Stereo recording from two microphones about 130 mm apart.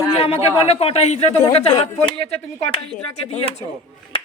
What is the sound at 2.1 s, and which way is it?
Speech, 45° left (ahead or behind).